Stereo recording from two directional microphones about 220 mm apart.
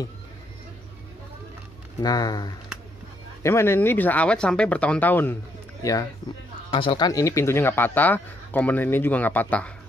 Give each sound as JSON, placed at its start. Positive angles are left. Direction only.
{"t": 2.0, "sound": "speech", "side_deg": 15}